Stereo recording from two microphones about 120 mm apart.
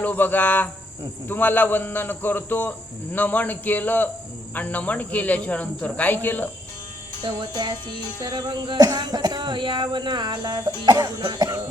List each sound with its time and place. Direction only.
0.0 s a man's voice: 15° left (ahead or behind)
7.2 s music: 40° right (ahead or behind)